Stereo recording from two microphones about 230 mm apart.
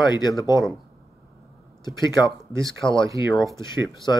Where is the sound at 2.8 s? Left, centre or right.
Centre.